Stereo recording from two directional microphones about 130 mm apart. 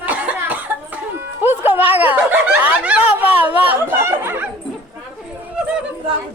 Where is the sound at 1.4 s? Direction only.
15° right (ahead or behind).